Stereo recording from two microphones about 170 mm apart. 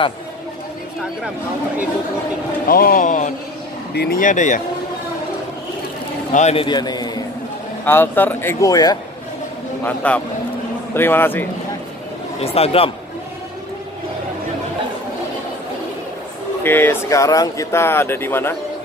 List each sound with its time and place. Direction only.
2.6 s speech: 60° left (ahead or behind)
3.9 s speech: 65° left (ahead or behind); by 4.6 s 50° left (ahead or behind)
6.3 s a man's voice: 35° left (ahead or behind)
7.8 s speech: 15° left (ahead or behind)
9.8 s speech: 10° left (ahead or behind)
12.4 s speech: 35° left (ahead or behind)
16.6 s speech: 10° left (ahead or behind)